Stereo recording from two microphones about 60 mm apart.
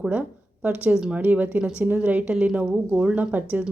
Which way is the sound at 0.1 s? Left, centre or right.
Right.